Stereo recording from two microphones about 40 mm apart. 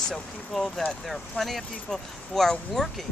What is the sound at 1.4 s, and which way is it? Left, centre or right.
Speech, left.